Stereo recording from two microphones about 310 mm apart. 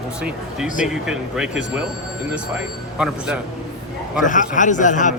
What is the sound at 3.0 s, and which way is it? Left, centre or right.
Speech, centre.